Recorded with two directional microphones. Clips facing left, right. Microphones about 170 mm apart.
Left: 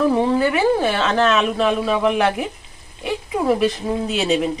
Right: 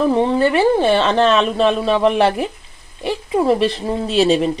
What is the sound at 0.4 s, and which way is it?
Speech, 25° right (ahead or behind).